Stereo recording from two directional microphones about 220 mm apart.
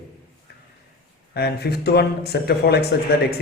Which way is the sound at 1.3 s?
45° left (ahead or behind).